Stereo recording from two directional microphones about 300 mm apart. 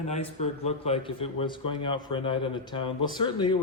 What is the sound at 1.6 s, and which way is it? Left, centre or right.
Speech, left.